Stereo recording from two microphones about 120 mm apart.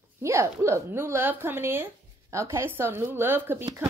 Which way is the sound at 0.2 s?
25° right (ahead or behind).